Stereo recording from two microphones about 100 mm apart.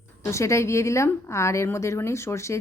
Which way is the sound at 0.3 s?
30° left (ahead or behind).